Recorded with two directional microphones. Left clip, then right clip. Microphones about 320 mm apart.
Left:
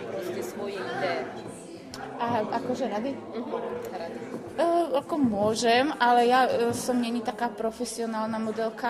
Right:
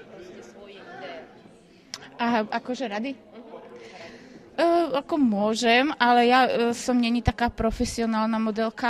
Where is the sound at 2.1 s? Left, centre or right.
Right.